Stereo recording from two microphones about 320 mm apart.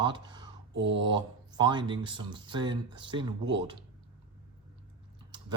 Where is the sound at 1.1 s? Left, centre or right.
Centre.